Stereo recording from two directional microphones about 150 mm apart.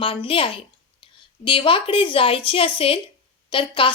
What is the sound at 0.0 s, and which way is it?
A woman's voice, 35° left (ahead or behind).